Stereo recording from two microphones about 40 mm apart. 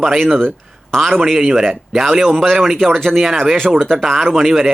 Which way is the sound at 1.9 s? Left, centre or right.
Centre.